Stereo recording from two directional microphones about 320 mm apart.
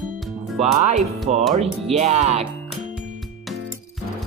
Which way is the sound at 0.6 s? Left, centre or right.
Right.